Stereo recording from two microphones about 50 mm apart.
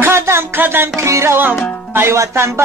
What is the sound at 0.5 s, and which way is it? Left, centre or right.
Music, right.